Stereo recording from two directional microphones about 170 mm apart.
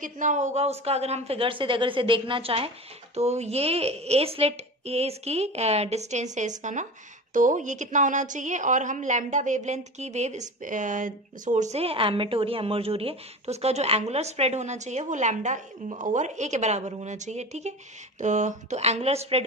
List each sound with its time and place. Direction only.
0.0 s a woman's voice: 45° right (ahead or behind)